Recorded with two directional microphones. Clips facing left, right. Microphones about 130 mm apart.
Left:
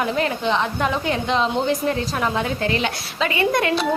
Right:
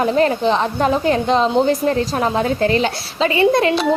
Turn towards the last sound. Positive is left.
turn(degrees=-30)  # may be behind; listen again after turning